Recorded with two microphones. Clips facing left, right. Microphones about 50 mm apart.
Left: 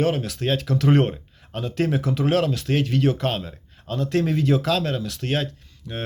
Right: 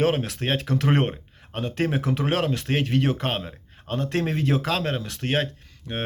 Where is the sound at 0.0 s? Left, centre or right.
Right.